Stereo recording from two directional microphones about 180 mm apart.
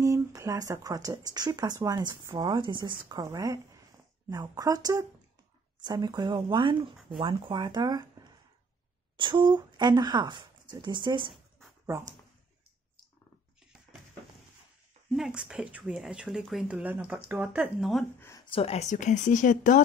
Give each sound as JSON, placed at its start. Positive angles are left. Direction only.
{"t": 0.0, "sound": "speech", "side_deg": -15}
{"t": 11.6, "sound": "dog", "side_deg": -15}
{"t": 15.1, "sound": "a woman's voice", "side_deg": -5}
{"t": 18.2, "sound": "a sound", "side_deg": 15}
{"t": 18.5, "sound": "speech", "side_deg": 35}